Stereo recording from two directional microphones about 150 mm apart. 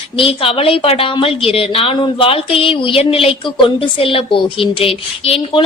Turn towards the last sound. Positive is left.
turn(degrees=35)  # may be behind; listen again after turning